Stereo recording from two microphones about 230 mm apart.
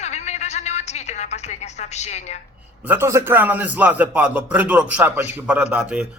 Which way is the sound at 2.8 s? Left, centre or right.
Centre.